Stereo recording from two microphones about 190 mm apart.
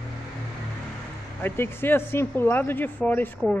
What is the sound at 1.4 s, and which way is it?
A man's voice, 10° left (ahead or behind).